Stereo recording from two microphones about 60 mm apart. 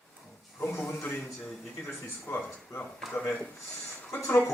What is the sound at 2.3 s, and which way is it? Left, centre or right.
Speech, left.